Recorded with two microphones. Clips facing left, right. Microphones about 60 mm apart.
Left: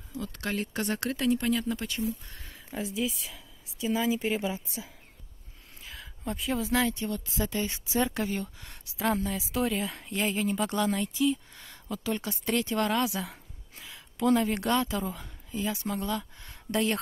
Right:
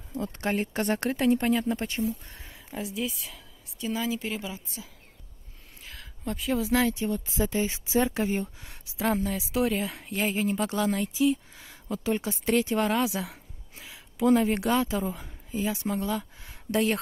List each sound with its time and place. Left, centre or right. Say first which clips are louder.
0.2 s speech: right 4 dB; right
2.4 s a woman's voice: even; centre
4.0 s a woman's voice: left 5 dB; left
5.9 s speech: right 1 dB; centre
8.3 s speech: right 4 dB; right
8.6 s speech: left 1 dB; centre
13.2 s a woman's voice: right 1 dB; centre
15.7 s speech: right 3 dB; centre
16.0 s speech: right 2 dB; centre